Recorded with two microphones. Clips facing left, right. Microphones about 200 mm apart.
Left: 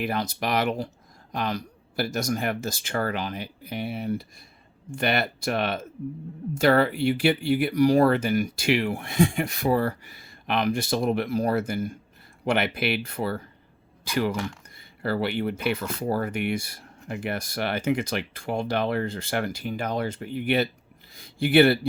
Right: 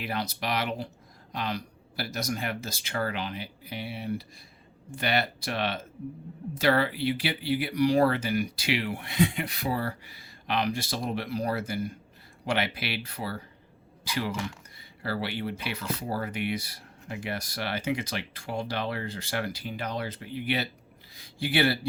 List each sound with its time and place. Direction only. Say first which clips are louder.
0.0 s speech: left 5 dB; 50° left (ahead or behind)